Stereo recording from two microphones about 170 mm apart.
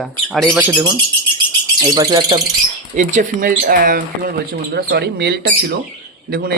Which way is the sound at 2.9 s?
45° right (ahead or behind).